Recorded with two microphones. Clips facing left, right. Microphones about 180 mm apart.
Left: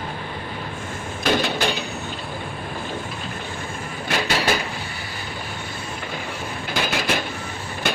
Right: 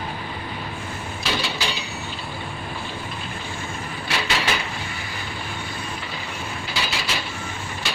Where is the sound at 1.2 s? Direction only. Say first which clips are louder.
Left 7 dB; 50° left (ahead or behind).